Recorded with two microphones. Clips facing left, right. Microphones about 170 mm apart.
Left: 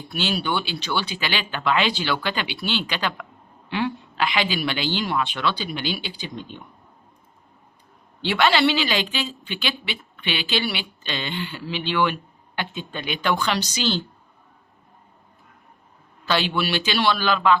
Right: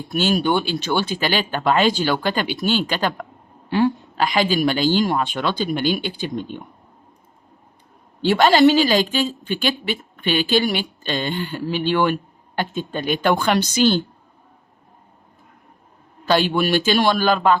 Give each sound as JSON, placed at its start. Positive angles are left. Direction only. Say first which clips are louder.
{"t": 0.1, "sound": "a woman's voice", "louder": "right 6 dB", "side_deg": -45}
{"t": 8.2, "sound": "a woman's voice", "louder": "right 6 dB", "side_deg": -45}
{"t": 16.2, "sound": "a woman's voice", "louder": "right 5 dB", "side_deg": -45}